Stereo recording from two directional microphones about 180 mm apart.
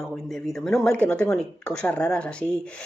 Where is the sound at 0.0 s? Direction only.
Centre (ahead or behind).